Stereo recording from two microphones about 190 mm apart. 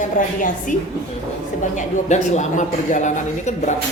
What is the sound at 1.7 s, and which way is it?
A man's voice, 35° left (ahead or behind).